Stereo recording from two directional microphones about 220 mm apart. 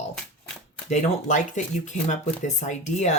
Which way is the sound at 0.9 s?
35° left (ahead or behind).